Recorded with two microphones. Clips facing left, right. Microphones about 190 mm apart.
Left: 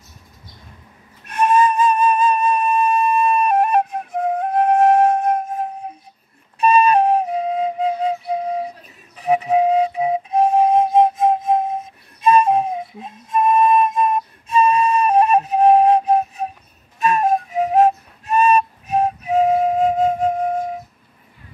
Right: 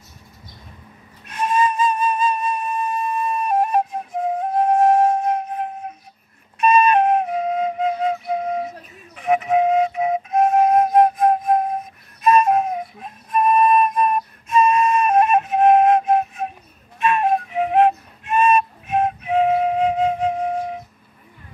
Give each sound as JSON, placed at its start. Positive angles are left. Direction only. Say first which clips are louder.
{"t": 1.2, "sound": "flute", "louder": "left 4 dB", "side_deg": 60}
{"t": 6.6, "sound": "flute", "louder": "left 1 dB", "side_deg": 35}
{"t": 17.0, "sound": "music", "louder": "left 1 dB", "side_deg": 40}